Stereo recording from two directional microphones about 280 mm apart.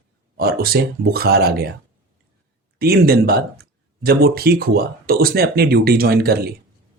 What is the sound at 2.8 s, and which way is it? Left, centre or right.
Speech, right.